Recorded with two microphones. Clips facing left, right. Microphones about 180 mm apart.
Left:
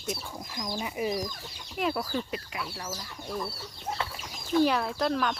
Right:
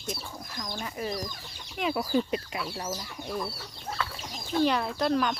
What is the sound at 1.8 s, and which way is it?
Speech, centre (ahead or behind).